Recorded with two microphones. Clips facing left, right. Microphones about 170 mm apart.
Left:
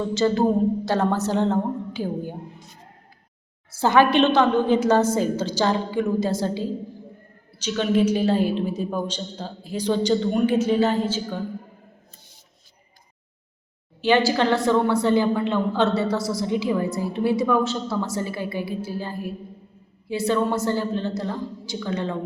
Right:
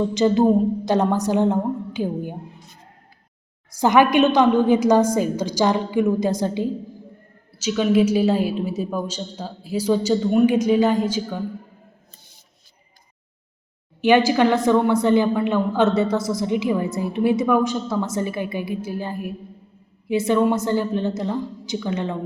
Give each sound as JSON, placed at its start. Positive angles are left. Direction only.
{"t": 0.1, "sound": "a woman's voice", "side_deg": -15}
{"t": 3.7, "sound": "a woman's voice", "side_deg": -15}
{"t": 7.6, "sound": "a woman's voice", "side_deg": -10}
{"t": 14.0, "sound": "a woman's voice", "side_deg": -20}